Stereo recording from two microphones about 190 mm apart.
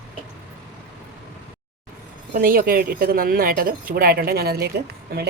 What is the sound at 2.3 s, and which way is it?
Speech, 50° right (ahead or behind).